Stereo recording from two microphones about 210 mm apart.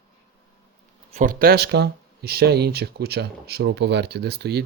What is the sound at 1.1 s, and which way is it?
Speech, 40° right (ahead or behind).